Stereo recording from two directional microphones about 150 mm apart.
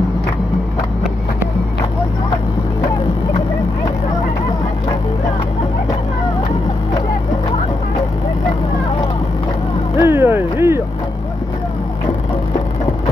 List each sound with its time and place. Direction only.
9.9 s vehicle: 15° right (ahead or behind)